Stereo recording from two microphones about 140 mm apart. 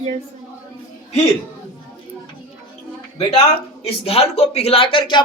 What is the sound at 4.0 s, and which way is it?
Speech, 45° left (ahead or behind).